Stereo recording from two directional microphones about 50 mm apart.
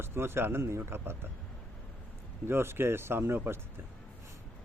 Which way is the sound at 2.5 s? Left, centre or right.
Right.